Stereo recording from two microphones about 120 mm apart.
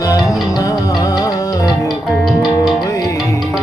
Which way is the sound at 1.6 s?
Centre (ahead or behind).